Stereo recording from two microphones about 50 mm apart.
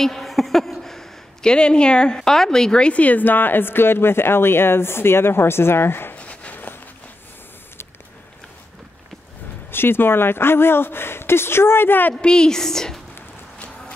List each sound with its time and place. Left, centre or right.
0.0 s a woman's voice: centre
2.9 s speech: left
6.1 s a sound: left
9.7 s speech: left
12.2 s a woman's voice: centre